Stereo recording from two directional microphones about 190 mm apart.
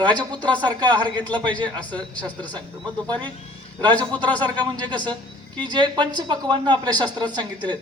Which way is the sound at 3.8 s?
10° left (ahead or behind).